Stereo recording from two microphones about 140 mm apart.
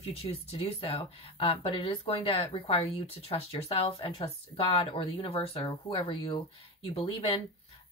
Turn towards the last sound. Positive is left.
turn(degrees=40)  # may be behind; listen again after turning